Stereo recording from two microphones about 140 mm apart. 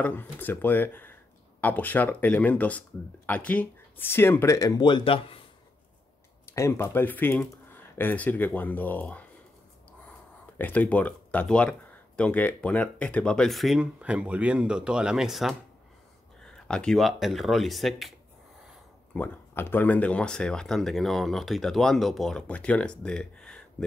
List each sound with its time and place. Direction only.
0.0 s speech: 15° left (ahead or behind); by 5.4 s 40° left (ahead or behind)
6.5 s speech: 20° left (ahead or behind)
10.6 s speech: 10° left (ahead or behind)
19.1 s speech: 15° left (ahead or behind)